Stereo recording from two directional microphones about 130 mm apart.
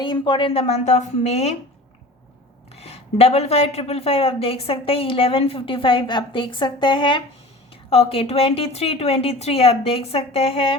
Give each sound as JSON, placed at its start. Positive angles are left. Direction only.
{"t": 0.0, "sound": "a woman's voice", "side_deg": 40}
{"t": 2.7, "sound": "speech", "side_deg": 50}
{"t": 7.9, "sound": "speech", "side_deg": 50}